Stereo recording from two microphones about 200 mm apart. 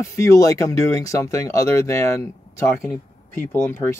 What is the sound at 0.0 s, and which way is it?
Speech, 15° left (ahead or behind).